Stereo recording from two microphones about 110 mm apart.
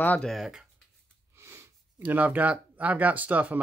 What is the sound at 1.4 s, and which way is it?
Speech, 20° right (ahead or behind).